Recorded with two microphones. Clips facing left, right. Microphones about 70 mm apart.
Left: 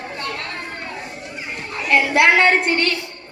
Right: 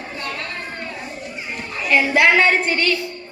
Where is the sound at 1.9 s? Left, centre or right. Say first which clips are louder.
Even; left.